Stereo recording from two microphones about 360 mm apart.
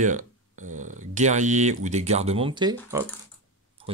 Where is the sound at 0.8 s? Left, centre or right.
Right.